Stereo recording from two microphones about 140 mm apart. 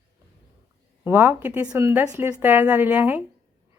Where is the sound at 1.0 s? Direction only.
15° right (ahead or behind).